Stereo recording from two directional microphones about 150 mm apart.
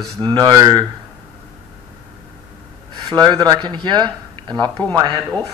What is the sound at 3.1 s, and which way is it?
Speech, 30° right (ahead or behind).